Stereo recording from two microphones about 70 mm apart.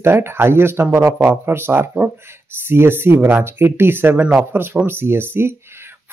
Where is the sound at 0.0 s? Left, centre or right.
Right.